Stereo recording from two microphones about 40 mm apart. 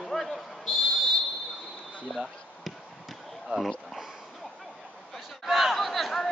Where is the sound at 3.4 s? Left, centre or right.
Centre.